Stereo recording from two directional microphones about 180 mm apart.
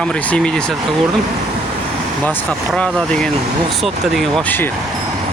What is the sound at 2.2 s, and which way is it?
Speech, 5° left (ahead or behind).